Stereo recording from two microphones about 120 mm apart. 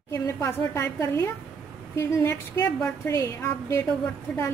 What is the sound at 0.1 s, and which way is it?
A woman's voice, 25° left (ahead or behind).